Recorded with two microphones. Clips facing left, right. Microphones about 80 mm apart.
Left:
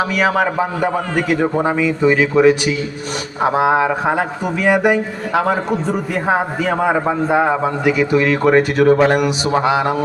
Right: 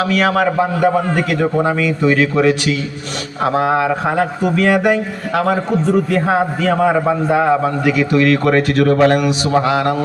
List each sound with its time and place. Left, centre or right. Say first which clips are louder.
0.0 s a man's voice: right 1 dB; centre